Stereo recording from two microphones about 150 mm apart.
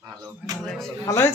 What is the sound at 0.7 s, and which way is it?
Speech, centre (ahead or behind).